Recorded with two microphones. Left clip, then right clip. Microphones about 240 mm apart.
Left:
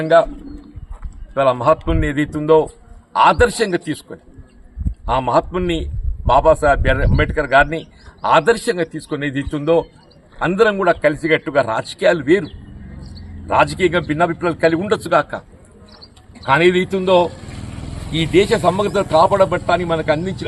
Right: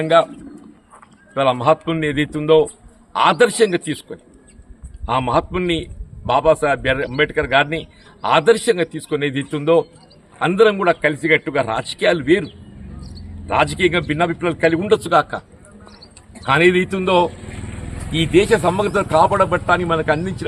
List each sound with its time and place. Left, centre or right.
0.0 s a man's voice: centre
1.3 s a man's voice: centre
13.5 s a man's voice: centre
17.4 s vehicle: left
18.1 s a man's voice: centre